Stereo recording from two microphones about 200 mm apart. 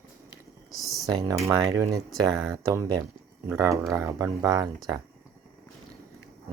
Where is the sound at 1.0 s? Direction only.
20° right (ahead or behind).